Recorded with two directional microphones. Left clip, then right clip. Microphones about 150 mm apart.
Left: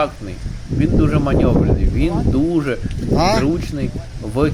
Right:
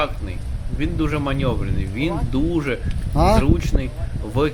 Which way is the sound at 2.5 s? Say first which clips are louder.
Left 3 dB; 10° left (ahead or behind).